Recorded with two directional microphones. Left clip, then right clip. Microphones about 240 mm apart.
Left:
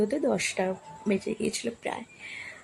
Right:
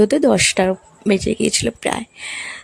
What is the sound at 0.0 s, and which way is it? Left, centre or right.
Speech, right.